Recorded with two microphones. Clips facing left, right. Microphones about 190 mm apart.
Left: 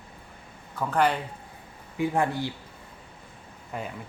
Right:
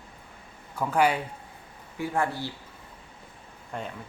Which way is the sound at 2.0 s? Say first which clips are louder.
Left 3 dB; 15° left (ahead or behind).